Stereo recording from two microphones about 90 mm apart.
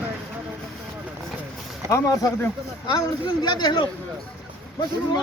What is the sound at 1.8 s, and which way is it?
Speech, 40° left (ahead or behind).